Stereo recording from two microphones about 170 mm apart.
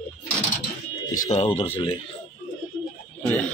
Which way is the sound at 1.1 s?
40° left (ahead or behind).